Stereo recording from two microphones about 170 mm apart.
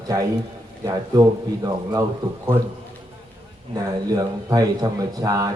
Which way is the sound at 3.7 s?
20° right (ahead or behind).